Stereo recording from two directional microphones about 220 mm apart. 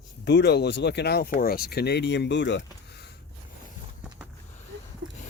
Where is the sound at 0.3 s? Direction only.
50° left (ahead or behind).